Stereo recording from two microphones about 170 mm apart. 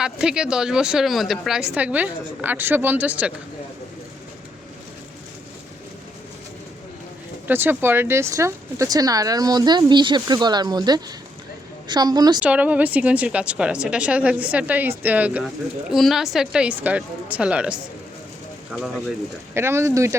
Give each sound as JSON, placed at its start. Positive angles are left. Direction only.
{"t": 0.0, "sound": "a woman's voice", "side_deg": -5}
{"t": 7.4, "sound": "speech", "side_deg": -10}
{"t": 12.4, "sound": "a woman's voice", "side_deg": -10}
{"t": 19.5, "sound": "a woman's voice", "side_deg": -15}